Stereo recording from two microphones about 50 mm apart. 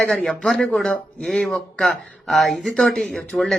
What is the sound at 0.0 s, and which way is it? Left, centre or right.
Speech, centre.